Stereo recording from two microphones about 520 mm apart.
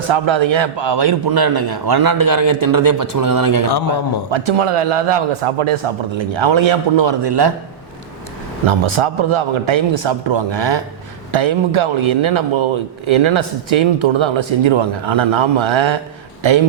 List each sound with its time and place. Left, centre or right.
0.1 s a man's voice: right
4.3 s a man's voice: right
8.6 s a man's voice: right